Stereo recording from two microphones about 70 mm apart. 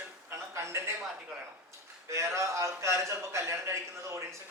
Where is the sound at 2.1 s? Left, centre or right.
Right.